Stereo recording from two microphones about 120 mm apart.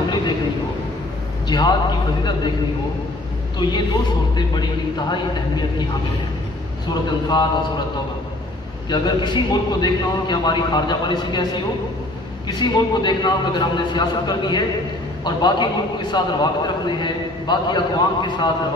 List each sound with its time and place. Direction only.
1.5 s a man's voice: 40° left (ahead or behind)
3.6 s a man's voice: 40° left (ahead or behind)
6.9 s a man's voice: 40° left (ahead or behind)
8.8 s a man's voice: 40° left (ahead or behind)